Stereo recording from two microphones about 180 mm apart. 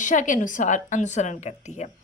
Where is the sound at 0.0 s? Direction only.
45° left (ahead or behind).